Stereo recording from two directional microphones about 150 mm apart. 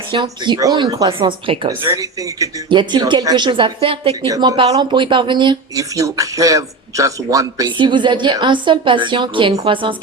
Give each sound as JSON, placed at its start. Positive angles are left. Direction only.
{"t": 0.1, "sound": "speech", "side_deg": -30}